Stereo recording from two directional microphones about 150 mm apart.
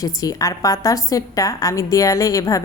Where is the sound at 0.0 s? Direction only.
25° left (ahead or behind).